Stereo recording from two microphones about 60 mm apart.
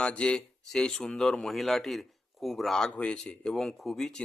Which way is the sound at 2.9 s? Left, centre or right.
Centre.